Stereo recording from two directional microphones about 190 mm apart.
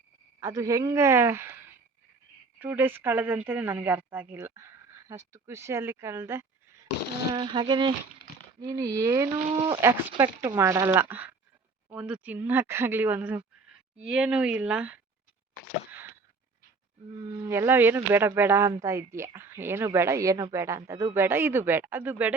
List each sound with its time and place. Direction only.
0.3 s speech: 15° right (ahead or behind)
7.3 s speech: 25° right (ahead or behind); by 14.9 s 5° right (ahead or behind)
15.9 s a sound: 10° right (ahead or behind)
17.4 s speech: 15° right (ahead or behind)